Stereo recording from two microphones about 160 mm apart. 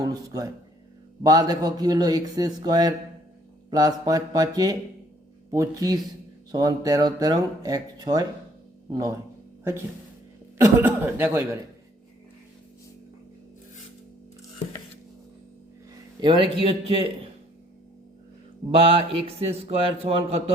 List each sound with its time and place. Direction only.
0.0 s speech: 20° right (ahead or behind)
10.6 s speech: 15° right (ahead or behind)
16.2 s a man's voice: 30° right (ahead or behind)
18.7 s a man's voice: 35° right (ahead or behind)